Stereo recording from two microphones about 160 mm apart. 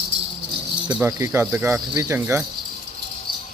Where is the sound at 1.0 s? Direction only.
20° right (ahead or behind).